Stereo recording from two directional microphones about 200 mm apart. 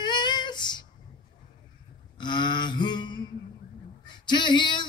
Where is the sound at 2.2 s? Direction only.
20° left (ahead or behind).